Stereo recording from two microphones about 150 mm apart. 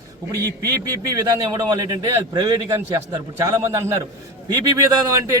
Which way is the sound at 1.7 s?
25° right (ahead or behind).